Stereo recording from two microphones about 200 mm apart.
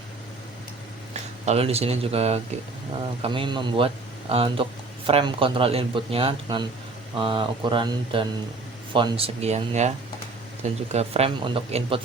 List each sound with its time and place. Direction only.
1.1 s speech: 30° right (ahead or behind)